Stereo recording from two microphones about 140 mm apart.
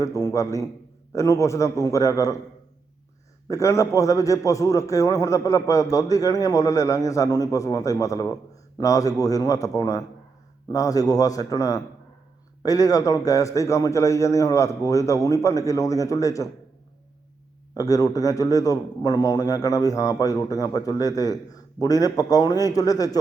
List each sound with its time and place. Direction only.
0.0 s a man's voice: 25° left (ahead or behind)
3.5 s a man's voice: 20° left (ahead or behind)
17.7 s a man's voice: 25° left (ahead or behind)